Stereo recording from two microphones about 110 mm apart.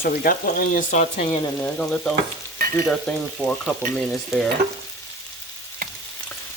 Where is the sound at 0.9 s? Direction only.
90° left.